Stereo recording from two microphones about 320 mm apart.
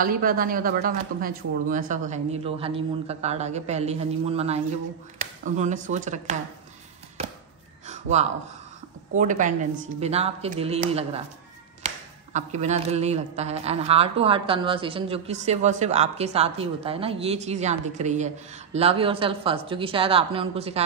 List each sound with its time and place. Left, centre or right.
0.0 s speech: right
7.2 s a sound: centre
9.1 s speech: right